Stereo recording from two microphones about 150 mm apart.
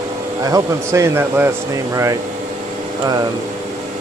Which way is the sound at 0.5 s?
20° right (ahead or behind).